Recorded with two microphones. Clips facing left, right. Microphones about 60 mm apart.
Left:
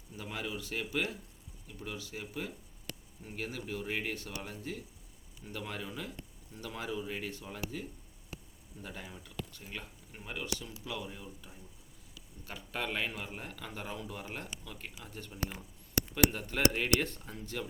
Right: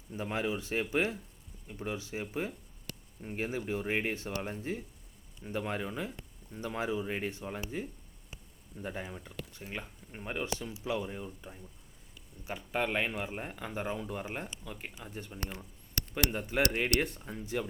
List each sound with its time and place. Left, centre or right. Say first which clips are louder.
0.1 s speech: right 6 dB; right
8.8 s speech: right 6 dB; right
15.4 s a sound: left 1 dB; centre
16.3 s speech: even; centre